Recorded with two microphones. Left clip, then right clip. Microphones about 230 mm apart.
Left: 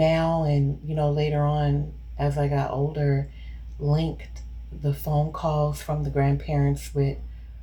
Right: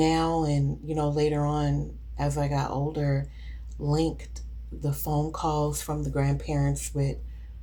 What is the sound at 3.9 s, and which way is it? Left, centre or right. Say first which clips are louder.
Speech: right 2 dB; right.